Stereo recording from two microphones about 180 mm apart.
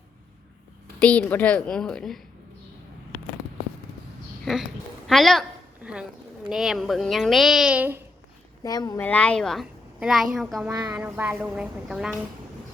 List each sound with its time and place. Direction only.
1.0 s a woman's voice: 10° left (ahead or behind)
4.4 s a sound: centre (ahead or behind)
6.5 s a woman's voice: centre (ahead or behind)
8.6 s speech: 20° left (ahead or behind)
9.0 s a woman's voice: 10° left (ahead or behind)
10.7 s speech: 20° right (ahead or behind)
10.9 s a woman's voice: 10° right (ahead or behind)